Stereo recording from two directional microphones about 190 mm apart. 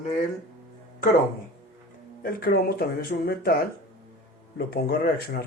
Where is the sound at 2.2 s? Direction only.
50° left (ahead or behind).